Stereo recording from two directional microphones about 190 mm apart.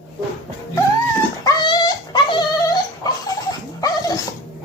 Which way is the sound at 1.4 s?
20° left (ahead or behind).